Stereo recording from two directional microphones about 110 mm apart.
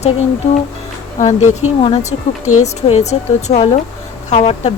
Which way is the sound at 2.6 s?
90° left.